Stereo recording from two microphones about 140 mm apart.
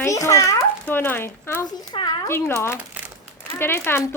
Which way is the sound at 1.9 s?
30° left (ahead or behind).